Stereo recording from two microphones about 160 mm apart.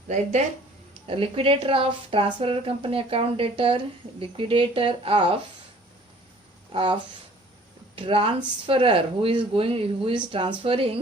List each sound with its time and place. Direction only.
0.1 s speech: 45° right (ahead or behind)
1.0 s speech: 35° right (ahead or behind)
6.7 s speech: 30° right (ahead or behind)